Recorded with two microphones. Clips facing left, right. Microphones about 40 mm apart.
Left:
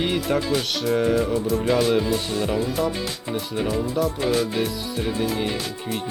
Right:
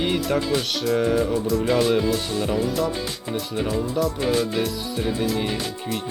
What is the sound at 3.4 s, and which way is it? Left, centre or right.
Speech, left.